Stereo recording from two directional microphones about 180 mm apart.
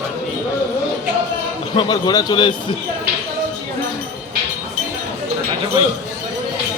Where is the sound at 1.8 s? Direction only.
25° left (ahead or behind).